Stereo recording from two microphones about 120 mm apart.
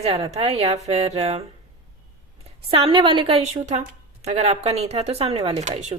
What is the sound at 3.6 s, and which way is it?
A woman's voice, 70° right (ahead or behind).